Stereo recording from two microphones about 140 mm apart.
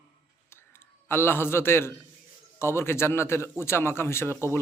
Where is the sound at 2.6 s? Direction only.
20° left (ahead or behind).